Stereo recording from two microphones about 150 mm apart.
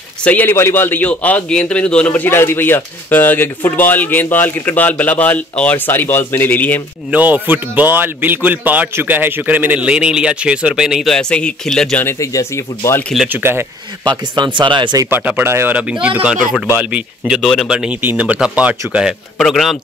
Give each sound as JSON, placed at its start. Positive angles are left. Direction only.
{"t": 0.2, "sound": "a man's voice", "side_deg": 10}
{"t": 7.1, "sound": "a man's voice", "side_deg": -10}
{"t": 12.0, "sound": "speech", "side_deg": 15}
{"t": 13.3, "sound": "a man's voice", "side_deg": -15}
{"t": 14.0, "sound": "speech", "side_deg": -30}
{"t": 15.0, "sound": "a man's voice", "side_deg": -10}